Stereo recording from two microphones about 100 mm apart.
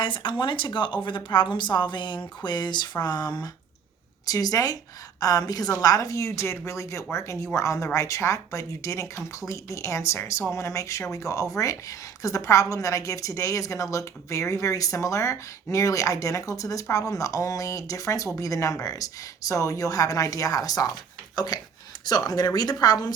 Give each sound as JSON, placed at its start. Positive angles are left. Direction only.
{"t": 0.0, "sound": "speech", "side_deg": 55}